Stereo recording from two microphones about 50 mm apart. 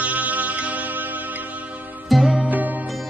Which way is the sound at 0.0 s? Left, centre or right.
Right.